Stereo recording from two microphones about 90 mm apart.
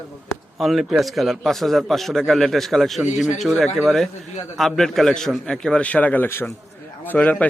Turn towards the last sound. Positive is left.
turn(degrees=20)  # may be behind; listen again after turning